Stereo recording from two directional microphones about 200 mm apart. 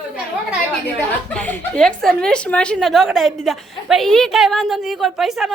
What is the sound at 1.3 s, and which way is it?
A woman's voice, 5° left (ahead or behind).